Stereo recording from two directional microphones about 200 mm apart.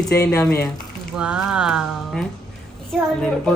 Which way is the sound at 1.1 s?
5° right (ahead or behind).